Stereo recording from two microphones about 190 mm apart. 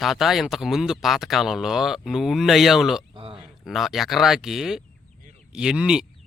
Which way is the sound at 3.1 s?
25° right (ahead or behind).